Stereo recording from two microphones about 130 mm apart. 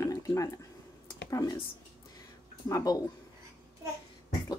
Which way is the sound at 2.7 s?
30° left (ahead or behind).